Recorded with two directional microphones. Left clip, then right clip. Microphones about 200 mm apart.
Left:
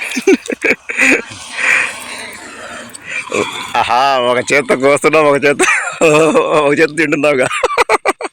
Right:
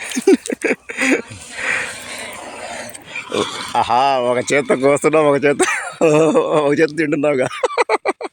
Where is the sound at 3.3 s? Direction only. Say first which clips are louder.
Left 2 dB; 25° left (ahead or behind).